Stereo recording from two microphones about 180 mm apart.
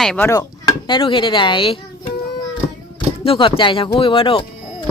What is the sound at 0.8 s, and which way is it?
Speech, 25° left (ahead or behind).